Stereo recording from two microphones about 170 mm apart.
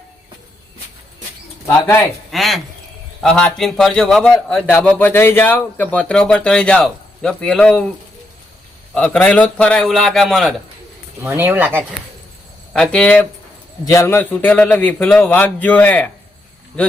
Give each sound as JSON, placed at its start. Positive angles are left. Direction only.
{"t": 1.6, "sound": "speech", "side_deg": 20}
{"t": 2.3, "sound": "a man's voice", "side_deg": 0}
{"t": 9.0, "sound": "a man's voice", "side_deg": 5}
{"t": 11.2, "sound": "speech", "side_deg": -10}
{"t": 12.7, "sound": "a man's voice", "side_deg": 5}